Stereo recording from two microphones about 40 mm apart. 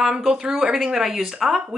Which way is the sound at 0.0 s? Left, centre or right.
Centre.